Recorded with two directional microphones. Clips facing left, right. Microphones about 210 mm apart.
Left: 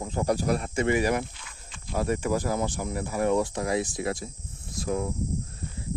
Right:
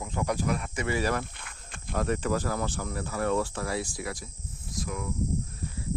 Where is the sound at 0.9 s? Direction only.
15° left (ahead or behind).